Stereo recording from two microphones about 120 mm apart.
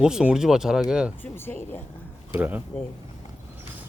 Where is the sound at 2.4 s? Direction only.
15° right (ahead or behind).